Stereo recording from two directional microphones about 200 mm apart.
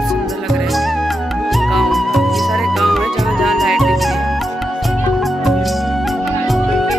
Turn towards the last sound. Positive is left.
turn(degrees=0)  # may be behind; listen again after turning